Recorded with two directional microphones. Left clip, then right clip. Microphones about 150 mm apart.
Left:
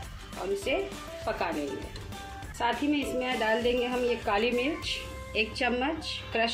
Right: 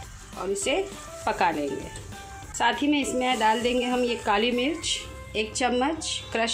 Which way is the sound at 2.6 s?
90° right.